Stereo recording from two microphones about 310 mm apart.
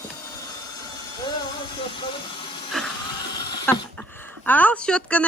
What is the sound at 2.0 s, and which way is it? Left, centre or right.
Vehicle, centre.